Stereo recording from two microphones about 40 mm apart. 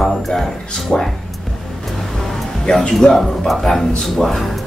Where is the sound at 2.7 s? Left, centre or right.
Centre.